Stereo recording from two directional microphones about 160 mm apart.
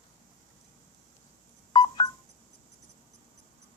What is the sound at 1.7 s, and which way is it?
Telephone dialing, 25° left (ahead or behind).